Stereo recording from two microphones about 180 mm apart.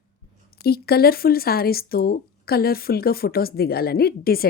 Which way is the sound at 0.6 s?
60° left (ahead or behind).